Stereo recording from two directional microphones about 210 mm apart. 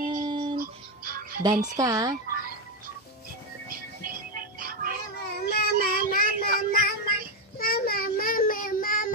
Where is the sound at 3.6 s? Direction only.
45° right (ahead or behind).